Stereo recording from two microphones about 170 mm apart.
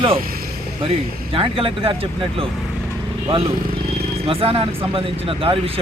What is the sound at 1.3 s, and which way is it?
Speech, 30° right (ahead or behind).